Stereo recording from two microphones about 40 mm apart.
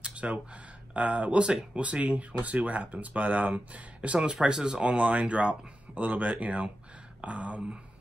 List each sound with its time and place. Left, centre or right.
0.0 s a sound: right
0.9 s speech: right
1.4 s speech: right
1.8 s speech: right
4.2 s speech: centre